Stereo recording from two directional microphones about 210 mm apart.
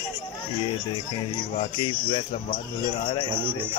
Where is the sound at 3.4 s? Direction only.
10° right (ahead or behind).